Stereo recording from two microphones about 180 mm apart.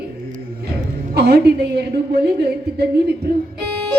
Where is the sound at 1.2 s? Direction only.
65° right (ahead or behind).